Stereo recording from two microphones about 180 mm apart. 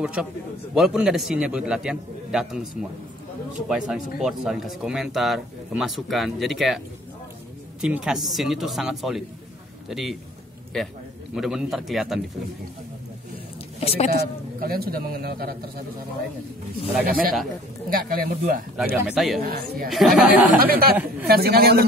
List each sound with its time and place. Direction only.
0.0 s speech: 5° right (ahead or behind)
7.8 s a man's voice: 5° right (ahead or behind)
13.7 s speech: 35° left (ahead or behind)
14.6 s a man's voice: 55° right (ahead or behind)
17.0 s speech: 55° right (ahead or behind)
19.0 s speech: centre (ahead or behind)
19.4 s a man's voice: 55° right (ahead or behind)
19.9 s speech: centre (ahead or behind)
20.4 s speech: 50° right (ahead or behind)
20.9 s a woman's voice: 10° right (ahead or behind)
21.3 s a man's voice: 60° right (ahead or behind)